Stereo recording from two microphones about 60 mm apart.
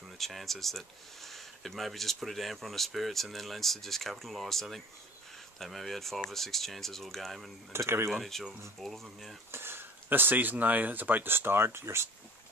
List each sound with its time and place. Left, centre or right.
0.2 s speech: centre
7.7 s speech: right
8.1 s speech: centre
9.5 s speech: right